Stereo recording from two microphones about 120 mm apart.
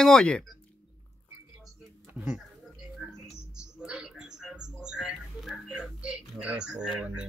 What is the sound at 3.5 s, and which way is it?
Mouse, 10° right (ahead or behind).